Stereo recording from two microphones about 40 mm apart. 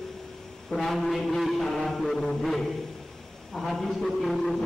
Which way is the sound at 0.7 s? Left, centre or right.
Centre.